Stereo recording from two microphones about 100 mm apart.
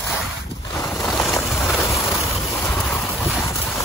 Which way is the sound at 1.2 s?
5° left (ahead or behind).